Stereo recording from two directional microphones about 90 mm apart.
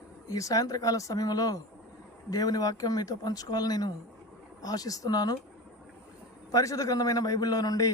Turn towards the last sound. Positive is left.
turn(degrees=45)  # may be behind; listen again after turning